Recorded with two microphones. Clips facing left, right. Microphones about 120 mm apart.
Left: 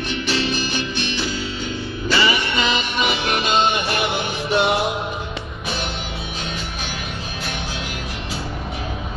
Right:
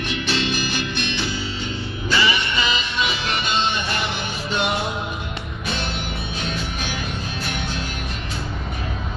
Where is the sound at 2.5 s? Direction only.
60° left (ahead or behind).